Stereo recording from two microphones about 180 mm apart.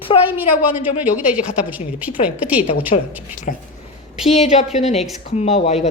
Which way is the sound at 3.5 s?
45° left (ahead or behind).